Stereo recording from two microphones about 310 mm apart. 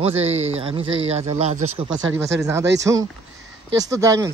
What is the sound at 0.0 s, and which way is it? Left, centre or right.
Speech, centre.